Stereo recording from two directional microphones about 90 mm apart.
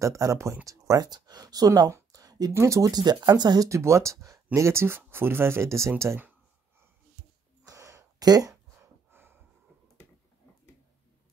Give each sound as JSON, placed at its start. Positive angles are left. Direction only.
{"t": 0.0, "sound": "speech", "side_deg": -40}
{"t": 1.9, "sound": "a sound", "side_deg": -35}
{"t": 2.5, "sound": "speech", "side_deg": -35}
{"t": 2.9, "sound": "speech", "side_deg": -50}
{"t": 3.6, "sound": "speech", "side_deg": -35}
{"t": 7.6, "sound": "a sound", "side_deg": -35}
{"t": 9.1, "sound": "snort", "side_deg": -25}